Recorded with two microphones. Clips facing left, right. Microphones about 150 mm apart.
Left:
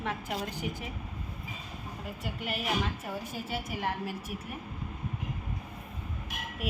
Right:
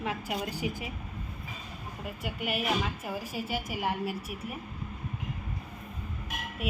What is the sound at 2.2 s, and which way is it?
A woman's voice, 5° right (ahead or behind).